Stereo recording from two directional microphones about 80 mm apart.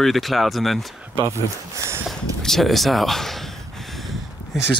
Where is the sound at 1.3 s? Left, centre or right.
Right.